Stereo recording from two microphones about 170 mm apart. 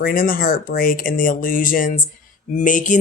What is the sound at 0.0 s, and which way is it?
Speech, 60° left (ahead or behind).